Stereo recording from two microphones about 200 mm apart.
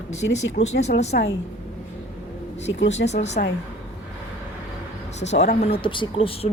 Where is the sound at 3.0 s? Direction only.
35° left (ahead or behind).